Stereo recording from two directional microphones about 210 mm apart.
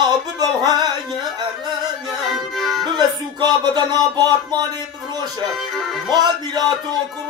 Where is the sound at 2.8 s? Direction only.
20° right (ahead or behind).